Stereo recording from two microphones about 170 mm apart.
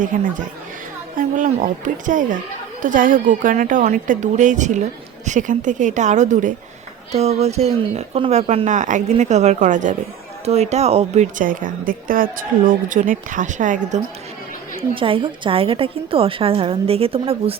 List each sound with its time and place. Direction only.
0.0 s a woman's voice: 50° right (ahead or behind)
14.9 s speech: 30° right (ahead or behind)